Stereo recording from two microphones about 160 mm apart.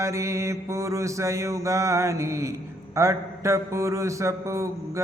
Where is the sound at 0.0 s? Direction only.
20° right (ahead or behind).